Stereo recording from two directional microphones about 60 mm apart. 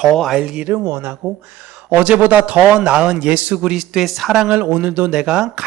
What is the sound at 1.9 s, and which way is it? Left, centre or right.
A man's voice, right.